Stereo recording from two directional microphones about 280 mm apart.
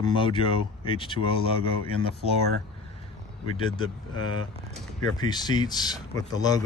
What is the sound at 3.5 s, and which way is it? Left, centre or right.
Speech, centre.